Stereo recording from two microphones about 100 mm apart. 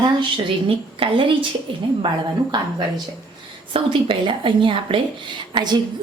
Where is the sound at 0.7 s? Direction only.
65° right (ahead or behind).